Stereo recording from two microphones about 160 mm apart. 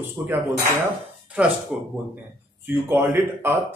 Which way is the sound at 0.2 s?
5° right (ahead or behind).